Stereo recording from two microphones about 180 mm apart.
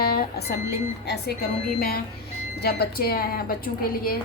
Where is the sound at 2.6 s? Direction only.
60° left (ahead or behind).